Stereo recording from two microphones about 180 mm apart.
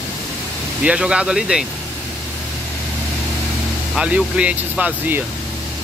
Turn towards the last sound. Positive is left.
turn(degrees=-5)  # may be behind; listen again after turning